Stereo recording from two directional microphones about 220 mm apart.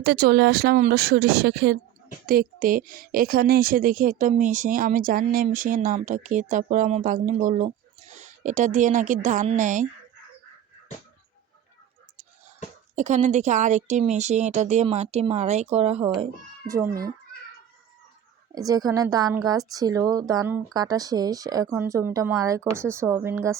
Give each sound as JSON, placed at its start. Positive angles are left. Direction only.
{"t": 0.0, "sound": "a woman's voice", "side_deg": -45}
{"t": 13.0, "sound": "a woman's voice", "side_deg": -35}
{"t": 18.5, "sound": "a woman's voice", "side_deg": -15}